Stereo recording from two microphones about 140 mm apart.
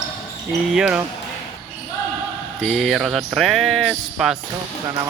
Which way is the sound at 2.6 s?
Centre (ahead or behind).